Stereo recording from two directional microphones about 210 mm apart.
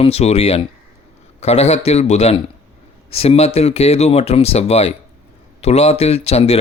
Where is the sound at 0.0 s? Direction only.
30° left (ahead or behind).